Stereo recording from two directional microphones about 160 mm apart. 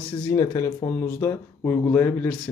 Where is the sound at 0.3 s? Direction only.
20° left (ahead or behind).